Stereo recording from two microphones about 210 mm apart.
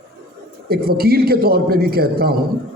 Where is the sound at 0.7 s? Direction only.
45° right (ahead or behind).